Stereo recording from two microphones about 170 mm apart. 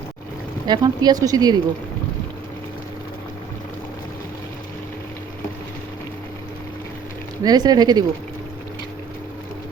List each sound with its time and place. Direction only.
0.7 s speech: 25° right (ahead or behind)
7.4 s speech: 25° right (ahead or behind)